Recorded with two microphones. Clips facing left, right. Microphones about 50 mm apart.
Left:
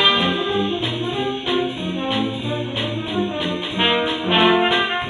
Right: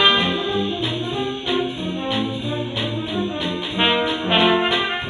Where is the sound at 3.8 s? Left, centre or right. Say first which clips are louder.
Even; centre.